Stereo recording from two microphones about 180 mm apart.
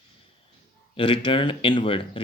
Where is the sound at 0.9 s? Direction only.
30° left (ahead or behind).